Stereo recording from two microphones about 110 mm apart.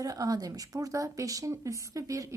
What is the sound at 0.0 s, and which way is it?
A woman's voice, 35° right (ahead or behind).